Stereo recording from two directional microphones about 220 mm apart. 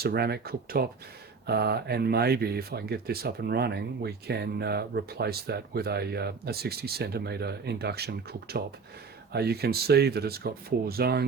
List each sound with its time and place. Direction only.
0.0 s speech: 45° right (ahead or behind)